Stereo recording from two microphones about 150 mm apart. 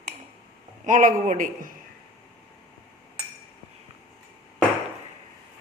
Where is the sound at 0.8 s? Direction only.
60° right (ahead or behind).